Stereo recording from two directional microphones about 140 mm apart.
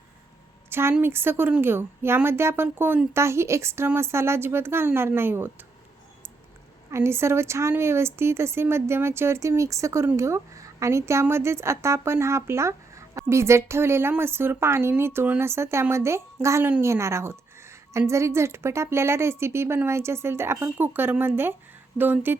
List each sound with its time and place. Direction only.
0.7 s a woman's voice: 15° right (ahead or behind)
6.9 s a woman's voice: 20° right (ahead or behind)